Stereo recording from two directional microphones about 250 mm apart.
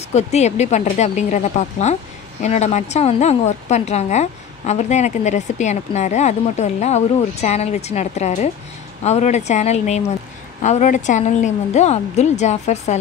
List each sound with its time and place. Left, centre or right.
0.1 s a woman's voice: left